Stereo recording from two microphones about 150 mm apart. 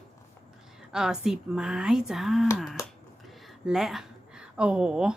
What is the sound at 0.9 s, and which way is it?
Speech, 5° right (ahead or behind).